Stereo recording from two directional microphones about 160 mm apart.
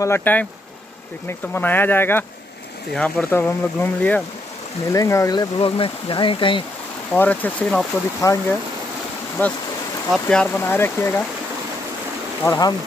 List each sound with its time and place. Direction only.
0.0 s speech: 15° left (ahead or behind)
1.5 s speech: 10° left (ahead or behind); by 6.6 s 30° left (ahead or behind)
7.1 s speech: 10° left (ahead or behind)
12.4 s speech: 25° left (ahead or behind)